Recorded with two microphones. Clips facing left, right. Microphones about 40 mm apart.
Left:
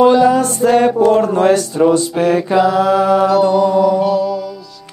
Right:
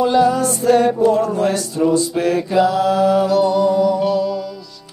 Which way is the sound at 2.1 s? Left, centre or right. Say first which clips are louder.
Left 4 dB; left.